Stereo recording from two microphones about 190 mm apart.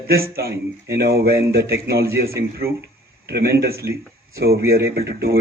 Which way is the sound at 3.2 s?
55° right (ahead or behind).